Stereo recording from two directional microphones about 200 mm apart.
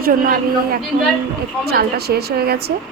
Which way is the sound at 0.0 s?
45° right (ahead or behind).